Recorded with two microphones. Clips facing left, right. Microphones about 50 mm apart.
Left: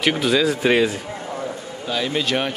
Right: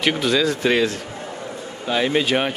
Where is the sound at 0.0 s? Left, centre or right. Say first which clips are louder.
Left 1 dB; centre.